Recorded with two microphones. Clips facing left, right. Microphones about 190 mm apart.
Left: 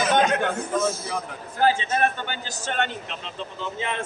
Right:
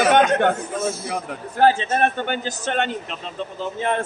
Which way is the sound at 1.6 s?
50° right (ahead or behind).